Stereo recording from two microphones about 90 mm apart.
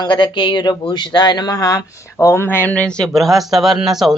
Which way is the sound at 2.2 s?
25° left (ahead or behind).